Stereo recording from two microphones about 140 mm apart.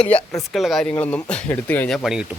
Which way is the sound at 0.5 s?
Centre (ahead or behind).